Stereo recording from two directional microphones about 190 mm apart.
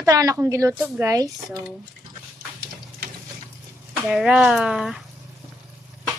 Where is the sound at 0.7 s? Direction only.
5° right (ahead or behind).